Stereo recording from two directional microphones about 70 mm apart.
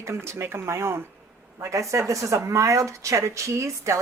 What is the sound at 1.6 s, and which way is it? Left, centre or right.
Speech, right.